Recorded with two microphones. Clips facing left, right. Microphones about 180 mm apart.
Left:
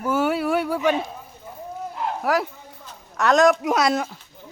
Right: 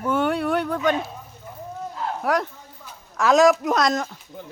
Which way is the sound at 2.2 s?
Centre (ahead or behind).